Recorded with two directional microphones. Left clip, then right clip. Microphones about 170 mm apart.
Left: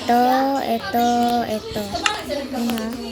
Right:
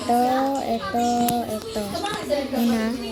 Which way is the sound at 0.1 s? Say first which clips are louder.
Left 4 dB; 5° left (ahead or behind).